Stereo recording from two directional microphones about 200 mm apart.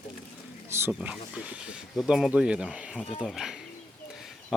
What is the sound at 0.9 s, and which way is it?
Speech, 5° right (ahead or behind).